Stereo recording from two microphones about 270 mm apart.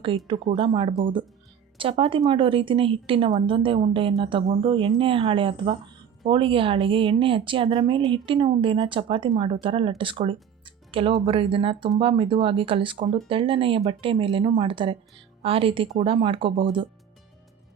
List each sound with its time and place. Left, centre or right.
0.5 s a woman's voice: centre